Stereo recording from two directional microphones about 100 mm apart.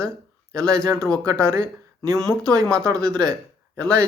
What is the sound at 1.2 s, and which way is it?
Speech, 30° right (ahead or behind).